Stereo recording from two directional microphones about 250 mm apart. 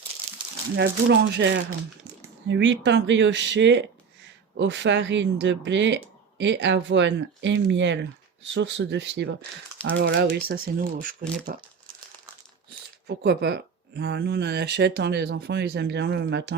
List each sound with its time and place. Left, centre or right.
0.8 s speech: right
13.1 s speech: right